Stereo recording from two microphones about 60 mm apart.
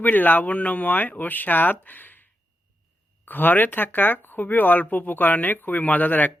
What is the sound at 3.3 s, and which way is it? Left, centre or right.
Speech, left.